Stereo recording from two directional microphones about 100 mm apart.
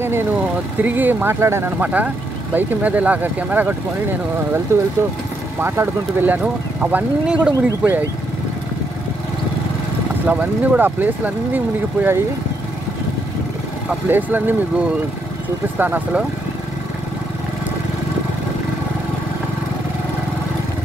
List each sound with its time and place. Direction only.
0.8 s speech: 20° right (ahead or behind)
10.2 s speech: 15° right (ahead or behind)
13.8 s speech: 20° right (ahead or behind)